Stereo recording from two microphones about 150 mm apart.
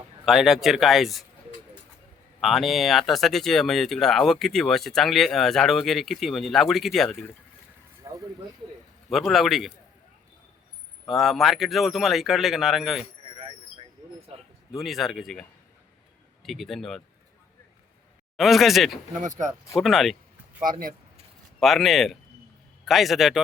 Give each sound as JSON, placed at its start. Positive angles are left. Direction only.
{"t": 0.3, "sound": "speech", "side_deg": 0}
{"t": 2.4, "sound": "speech", "side_deg": 0}
{"t": 8.0, "sound": "a sound", "side_deg": -20}
{"t": 9.0, "sound": "speech", "side_deg": 0}
{"t": 11.0, "sound": "speech", "side_deg": 0}
{"t": 14.7, "sound": "speech", "side_deg": 0}
{"t": 16.4, "sound": "speech", "side_deg": 0}
{"t": 18.3, "sound": "speech", "side_deg": 0}
{"t": 19.2, "sound": "speech", "side_deg": -55}
{"t": 19.8, "sound": "speech", "side_deg": 0}
{"t": 20.7, "sound": "speech", "side_deg": -70}
{"t": 21.6, "sound": "speech", "side_deg": 0}